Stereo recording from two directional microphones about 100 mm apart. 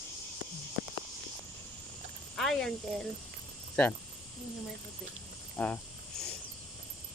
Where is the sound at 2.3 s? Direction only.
5° left (ahead or behind).